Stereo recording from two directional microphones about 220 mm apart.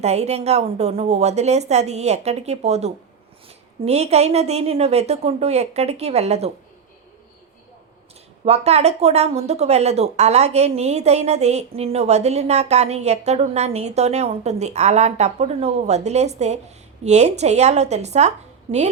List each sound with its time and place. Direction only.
0.0 s speech: 30° right (ahead or behind)
8.4 s a woman's voice: 30° right (ahead or behind)